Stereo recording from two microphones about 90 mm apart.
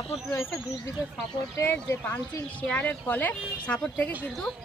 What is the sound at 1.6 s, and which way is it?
Speech, 15° left (ahead or behind).